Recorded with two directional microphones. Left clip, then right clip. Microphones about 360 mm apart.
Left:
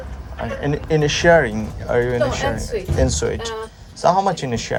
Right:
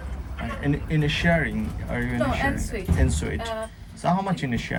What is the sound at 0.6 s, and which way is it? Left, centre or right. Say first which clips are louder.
Speech: left 9 dB; centre.